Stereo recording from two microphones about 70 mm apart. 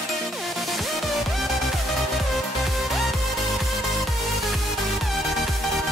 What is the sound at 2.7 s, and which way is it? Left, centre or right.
Music, centre.